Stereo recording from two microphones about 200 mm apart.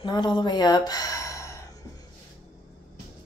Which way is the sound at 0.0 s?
20° left (ahead or behind).